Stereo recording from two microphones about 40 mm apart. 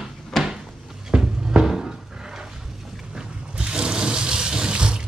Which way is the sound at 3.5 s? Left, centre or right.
Right.